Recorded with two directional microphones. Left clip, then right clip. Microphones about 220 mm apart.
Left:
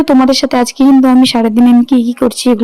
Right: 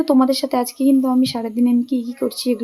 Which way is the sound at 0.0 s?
35° left (ahead or behind).